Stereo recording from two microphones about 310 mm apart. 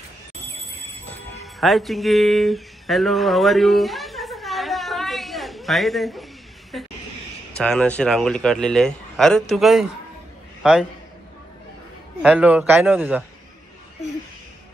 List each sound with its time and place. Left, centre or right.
1.1 s music: centre
7.5 s a man's voice: centre
12.2 s speech: centre